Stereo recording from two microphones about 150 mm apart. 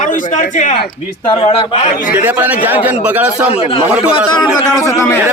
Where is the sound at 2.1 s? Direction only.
10° right (ahead or behind).